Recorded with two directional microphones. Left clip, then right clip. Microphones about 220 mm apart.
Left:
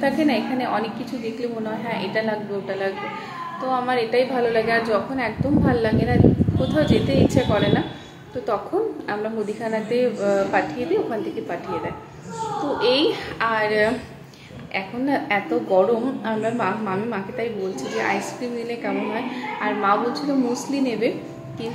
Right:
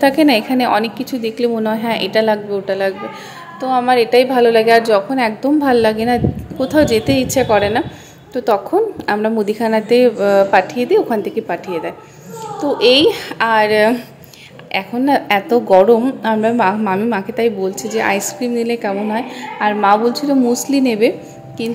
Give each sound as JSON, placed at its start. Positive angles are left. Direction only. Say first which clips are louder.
{"t": 0.0, "sound": "a woman's voice", "louder": "right 9 dB", "side_deg": -45}
{"t": 9.0, "sound": "a woman's voice", "louder": "right 9 dB", "side_deg": -45}